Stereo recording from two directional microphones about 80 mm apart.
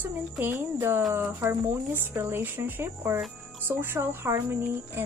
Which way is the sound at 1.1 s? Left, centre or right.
Right.